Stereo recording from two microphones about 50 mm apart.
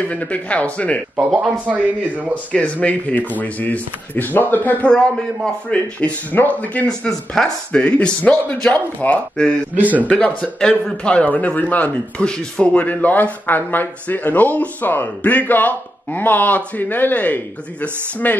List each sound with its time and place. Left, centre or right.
0.0 s a man's voice: left
1.7 s a man's voice: right
2.5 s speech: left
4.8 s a man's voice: centre; by 6.9 s left
6.9 s speech: centre
7.7 s a man's voice: left
9.8 s a man's voice: right
10.0 s a man's voice: left
12.2 s speech: centre; by 18.4 s left